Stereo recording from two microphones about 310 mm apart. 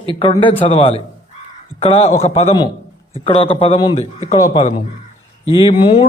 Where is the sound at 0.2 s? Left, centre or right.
Centre.